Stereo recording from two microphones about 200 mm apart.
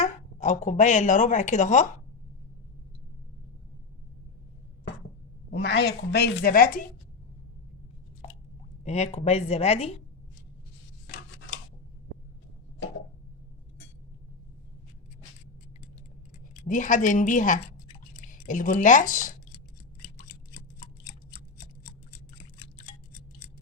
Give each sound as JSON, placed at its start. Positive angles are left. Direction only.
{"t": 0.0, "sound": "speech", "side_deg": 35}
{"t": 5.5, "sound": "a woman's voice", "side_deg": 60}
{"t": 8.8, "sound": "a woman's voice", "side_deg": 35}
{"t": 16.6, "sound": "a woman's voice", "side_deg": 40}